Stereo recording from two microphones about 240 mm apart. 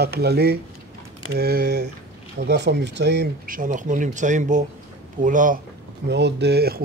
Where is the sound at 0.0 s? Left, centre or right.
Right.